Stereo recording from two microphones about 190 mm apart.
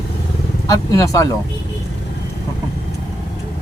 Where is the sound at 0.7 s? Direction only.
15° left (ahead or behind).